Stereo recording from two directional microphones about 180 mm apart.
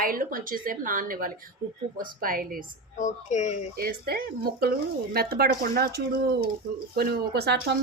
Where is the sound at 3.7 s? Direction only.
55° right (ahead or behind).